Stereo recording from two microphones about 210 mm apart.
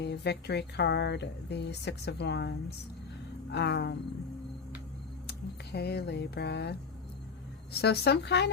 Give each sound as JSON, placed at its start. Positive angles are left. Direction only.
{"t": 0.0, "sound": "speech", "side_deg": 55}
{"t": 5.2, "sound": "speech", "side_deg": 50}